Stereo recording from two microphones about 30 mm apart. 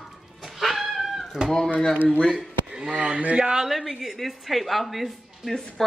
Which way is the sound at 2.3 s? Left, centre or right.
Right.